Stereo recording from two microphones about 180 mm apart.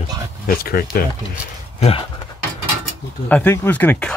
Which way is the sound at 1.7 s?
35° left (ahead or behind).